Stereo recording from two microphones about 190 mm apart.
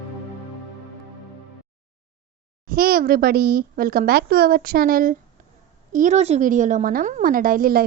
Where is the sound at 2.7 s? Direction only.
50° right (ahead or behind).